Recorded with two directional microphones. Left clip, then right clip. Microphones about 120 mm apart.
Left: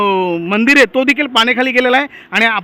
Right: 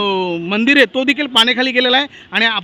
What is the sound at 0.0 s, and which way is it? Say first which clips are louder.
A man's voice: left 4 dB; 20° right (ahead or behind).